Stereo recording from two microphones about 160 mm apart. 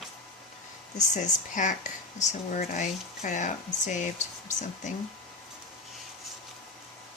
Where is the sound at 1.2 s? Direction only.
50° left (ahead or behind).